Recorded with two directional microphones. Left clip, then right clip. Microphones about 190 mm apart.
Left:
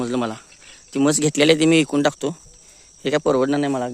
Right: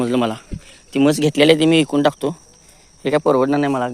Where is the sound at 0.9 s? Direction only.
25° left (ahead or behind).